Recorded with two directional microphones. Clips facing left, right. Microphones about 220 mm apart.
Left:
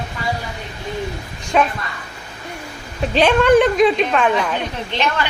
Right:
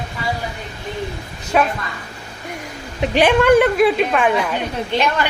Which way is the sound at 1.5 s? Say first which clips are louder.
Even; 5° right (ahead or behind).